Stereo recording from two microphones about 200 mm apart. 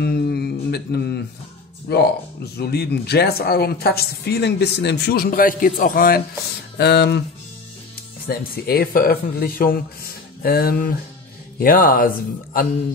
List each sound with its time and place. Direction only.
0.0 s mantra: 50° left (ahead or behind)
1.9 s speech: 55° left (ahead or behind)
8.3 s speech: 50° left (ahead or behind)